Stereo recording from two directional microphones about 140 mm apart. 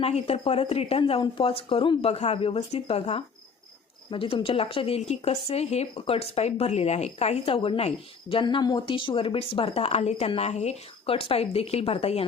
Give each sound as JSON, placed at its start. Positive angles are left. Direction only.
{"t": 0.0, "sound": "speech", "side_deg": 45}